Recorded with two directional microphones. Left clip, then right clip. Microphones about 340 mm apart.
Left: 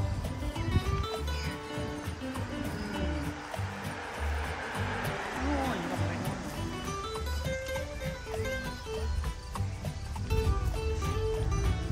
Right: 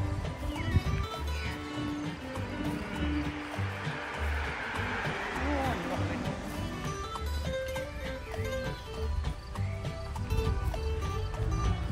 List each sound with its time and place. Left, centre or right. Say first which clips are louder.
4.5 s music: right 1 dB; left